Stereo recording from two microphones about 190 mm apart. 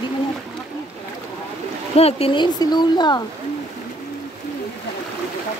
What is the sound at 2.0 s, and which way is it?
Speech, 30° left (ahead or behind).